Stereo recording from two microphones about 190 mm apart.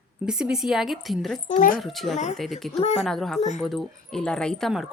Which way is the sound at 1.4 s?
45° left (ahead or behind).